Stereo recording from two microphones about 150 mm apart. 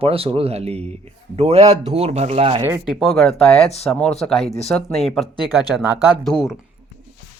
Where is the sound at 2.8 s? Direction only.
Centre (ahead or behind).